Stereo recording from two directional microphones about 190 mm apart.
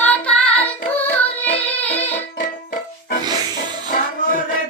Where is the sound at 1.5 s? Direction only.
10° left (ahead or behind).